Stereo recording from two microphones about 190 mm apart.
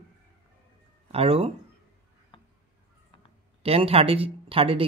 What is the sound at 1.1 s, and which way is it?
Speech, 30° right (ahead or behind).